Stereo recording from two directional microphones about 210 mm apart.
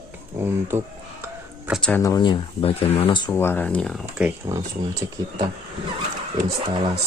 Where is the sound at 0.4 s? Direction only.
10° right (ahead or behind).